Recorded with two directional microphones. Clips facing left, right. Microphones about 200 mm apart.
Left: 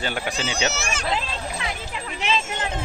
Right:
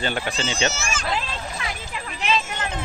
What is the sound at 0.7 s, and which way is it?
Speech, 65° left (ahead or behind).